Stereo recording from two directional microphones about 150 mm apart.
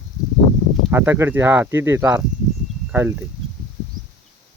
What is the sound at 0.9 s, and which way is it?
Speech, 15° right (ahead or behind).